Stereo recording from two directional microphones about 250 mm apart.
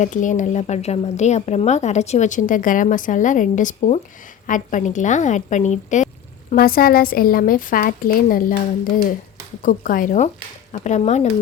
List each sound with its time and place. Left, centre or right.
0.0 s a woman's voice: left
9.6 s a woman's voice: left